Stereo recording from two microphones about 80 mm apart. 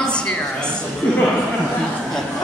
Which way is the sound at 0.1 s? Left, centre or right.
Centre.